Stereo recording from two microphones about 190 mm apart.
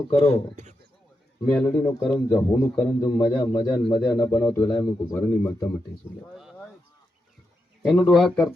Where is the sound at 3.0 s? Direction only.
20° left (ahead or behind).